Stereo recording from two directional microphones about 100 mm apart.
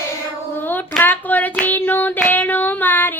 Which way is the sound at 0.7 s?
20° left (ahead or behind).